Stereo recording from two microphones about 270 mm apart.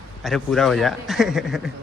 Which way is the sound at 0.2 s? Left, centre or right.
Centre.